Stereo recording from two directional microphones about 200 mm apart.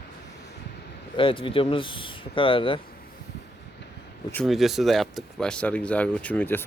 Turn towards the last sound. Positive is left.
turn(degrees=10)  # may be behind; listen again after turning